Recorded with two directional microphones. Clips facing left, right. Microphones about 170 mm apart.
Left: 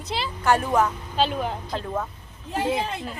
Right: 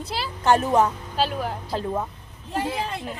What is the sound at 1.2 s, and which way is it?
Speech, 5° right (ahead or behind).